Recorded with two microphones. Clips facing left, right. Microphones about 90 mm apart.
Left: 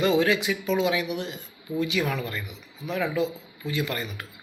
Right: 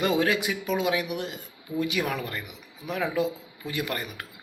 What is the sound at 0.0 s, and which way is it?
Speech, 45° right (ahead or behind).